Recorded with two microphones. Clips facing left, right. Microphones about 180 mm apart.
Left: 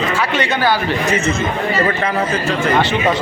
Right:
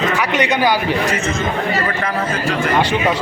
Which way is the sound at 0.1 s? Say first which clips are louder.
Right 1 dB; 15° right (ahead or behind).